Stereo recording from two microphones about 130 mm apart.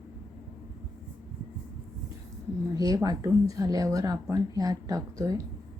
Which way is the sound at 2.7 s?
30° right (ahead or behind).